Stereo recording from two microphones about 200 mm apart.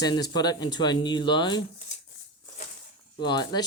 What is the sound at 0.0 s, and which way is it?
Speech, 20° left (ahead or behind).